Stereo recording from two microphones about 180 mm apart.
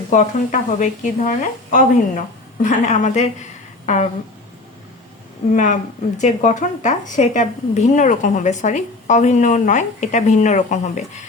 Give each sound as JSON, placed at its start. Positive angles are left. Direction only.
{"t": 0.1, "sound": "a woman's voice", "side_deg": 45}
{"t": 5.5, "sound": "a woman's voice", "side_deg": 45}